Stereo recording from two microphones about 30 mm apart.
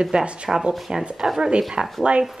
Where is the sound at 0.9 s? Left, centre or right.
Right.